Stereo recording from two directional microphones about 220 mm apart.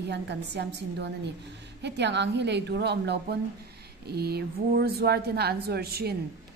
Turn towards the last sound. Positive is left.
turn(degrees=-45)  # may be behind; listen again after turning